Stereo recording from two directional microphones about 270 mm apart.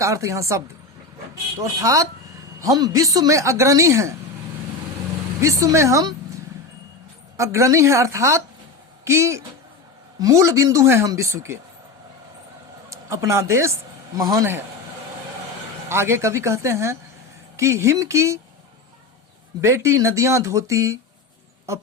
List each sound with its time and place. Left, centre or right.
0.0 s a woman's voice: centre
5.4 s a woman's voice: centre
12.9 s a woman's voice: centre
15.9 s a woman's voice: centre
19.6 s a woman's voice: centre